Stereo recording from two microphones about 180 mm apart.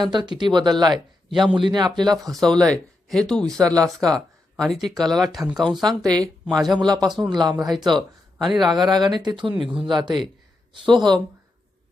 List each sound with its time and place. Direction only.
0.1 s speech: 25° right (ahead or behind)
1.3 s speech: centre (ahead or behind)
1.5 s speech: 25° right (ahead or behind)
2.3 s speech: centre (ahead or behind)
6.0 s speech: 20° right (ahead or behind)
6.4 s speech: centre (ahead or behind)
6.7 s speech: 20° right (ahead or behind)
7.5 s speech: centre (ahead or behind)
8.8 s speech: 25° right (ahead or behind)